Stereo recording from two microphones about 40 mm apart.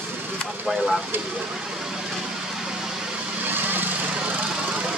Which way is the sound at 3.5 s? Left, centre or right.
Right.